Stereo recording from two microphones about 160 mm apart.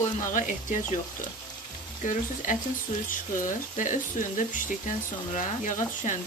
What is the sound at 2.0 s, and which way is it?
Frying, 55° left (ahead or behind).